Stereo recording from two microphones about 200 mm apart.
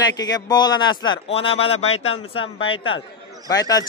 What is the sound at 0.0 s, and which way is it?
Speech, 20° left (ahead or behind).